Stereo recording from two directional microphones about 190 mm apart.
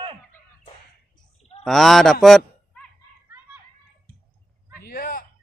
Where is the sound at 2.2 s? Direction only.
5° left (ahead or behind).